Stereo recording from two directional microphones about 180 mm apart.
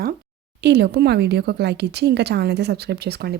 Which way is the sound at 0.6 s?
65° right (ahead or behind).